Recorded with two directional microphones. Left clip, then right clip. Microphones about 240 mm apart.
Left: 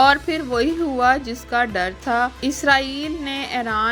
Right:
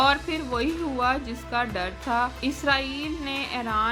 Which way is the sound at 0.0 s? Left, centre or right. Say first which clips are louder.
Left 7 dB; centre.